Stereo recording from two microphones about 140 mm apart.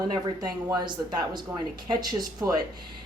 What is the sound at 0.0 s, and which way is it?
Speech, 30° right (ahead or behind).